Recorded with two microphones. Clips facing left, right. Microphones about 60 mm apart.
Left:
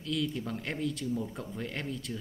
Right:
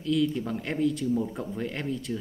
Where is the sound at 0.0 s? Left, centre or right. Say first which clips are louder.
Right 7 dB; centre.